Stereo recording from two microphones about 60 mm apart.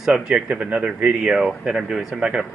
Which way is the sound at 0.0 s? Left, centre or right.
Centre.